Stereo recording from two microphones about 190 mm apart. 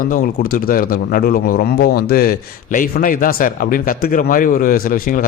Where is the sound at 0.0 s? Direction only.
50° left (ahead or behind).